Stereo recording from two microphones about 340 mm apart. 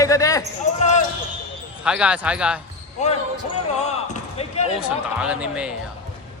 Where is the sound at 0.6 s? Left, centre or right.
Left.